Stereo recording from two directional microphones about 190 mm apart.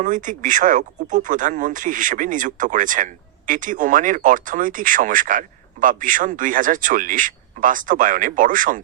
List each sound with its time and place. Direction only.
0.0 s speech: 45° right (ahead or behind)